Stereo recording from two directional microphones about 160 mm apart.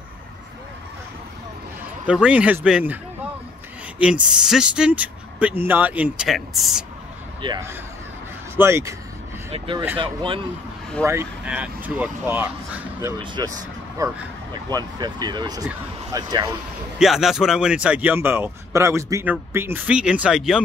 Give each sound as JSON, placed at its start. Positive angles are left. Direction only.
{"t": 2.0, "sound": "a man's voice", "side_deg": -5}
{"t": 4.0, "sound": "speech", "side_deg": -5}
{"t": 7.4, "sound": "speech", "side_deg": -30}
{"t": 8.5, "sound": "a man's voice", "side_deg": -15}
{"t": 9.5, "sound": "speech", "side_deg": -35}
{"t": 11.1, "sound": "a man's voice", "side_deg": -15}
{"t": 13.2, "sound": "speech", "side_deg": -30}
{"t": 17.0, "sound": "a man's voice", "side_deg": 0}